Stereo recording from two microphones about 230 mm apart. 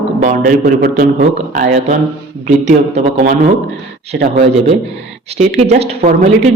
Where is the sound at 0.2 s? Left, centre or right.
Right.